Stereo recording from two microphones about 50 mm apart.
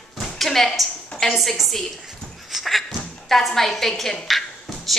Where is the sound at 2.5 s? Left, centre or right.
Centre.